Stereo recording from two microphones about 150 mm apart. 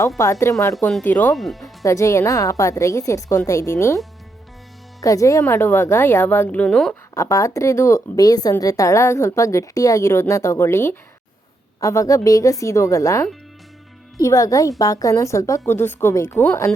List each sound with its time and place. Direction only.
0.2 s a woman's voice: 20° left (ahead or behind)
1.3 s speech: centre (ahead or behind)
1.8 s speech: 20° left (ahead or behind)
5.0 s a woman's voice: 20° left (ahead or behind); by 6.9 s 5° left (ahead or behind)
7.1 s speech: 20° left (ahead or behind)